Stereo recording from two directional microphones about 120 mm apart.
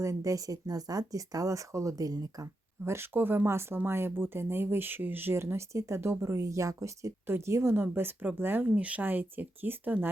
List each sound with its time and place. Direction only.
0.0 s speech: 25° right (ahead or behind)